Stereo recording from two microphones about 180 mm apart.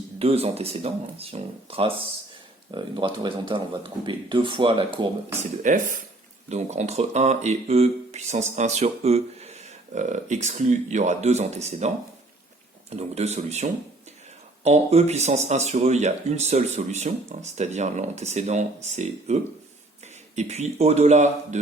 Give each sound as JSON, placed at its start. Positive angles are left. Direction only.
{"t": 0.2, "sound": "speech", "side_deg": -35}
{"t": 5.4, "sound": "speech", "side_deg": -45}
{"t": 12.9, "sound": "speech", "side_deg": -35}